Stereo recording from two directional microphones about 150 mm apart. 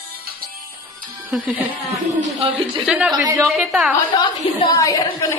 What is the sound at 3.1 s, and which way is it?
Speech, 20° right (ahead or behind).